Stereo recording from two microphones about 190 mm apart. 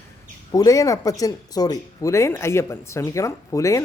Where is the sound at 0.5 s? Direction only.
20° left (ahead or behind).